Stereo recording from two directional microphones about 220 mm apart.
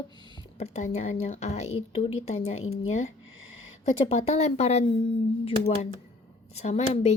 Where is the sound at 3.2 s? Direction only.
65° left (ahead or behind).